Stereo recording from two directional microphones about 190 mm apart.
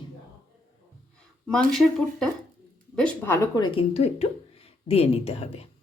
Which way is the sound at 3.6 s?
30° left (ahead or behind).